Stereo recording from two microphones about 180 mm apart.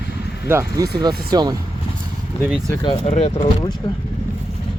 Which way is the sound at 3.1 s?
35° left (ahead or behind).